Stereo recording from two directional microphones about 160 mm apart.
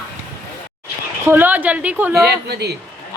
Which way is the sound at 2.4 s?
90° right.